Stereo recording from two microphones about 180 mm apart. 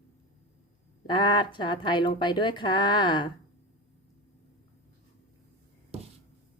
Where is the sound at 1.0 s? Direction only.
25° left (ahead or behind).